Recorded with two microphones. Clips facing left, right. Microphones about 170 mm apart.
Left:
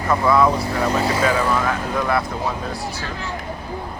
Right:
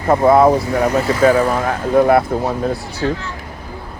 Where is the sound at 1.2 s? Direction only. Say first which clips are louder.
Right 6 dB; 40° right (ahead or behind).